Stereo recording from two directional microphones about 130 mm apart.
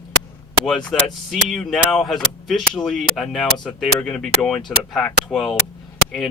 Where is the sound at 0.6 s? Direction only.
5° left (ahead or behind).